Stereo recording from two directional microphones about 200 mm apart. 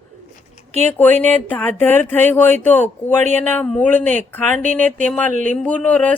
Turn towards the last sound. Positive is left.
turn(degrees=5)  # may be behind; listen again after turning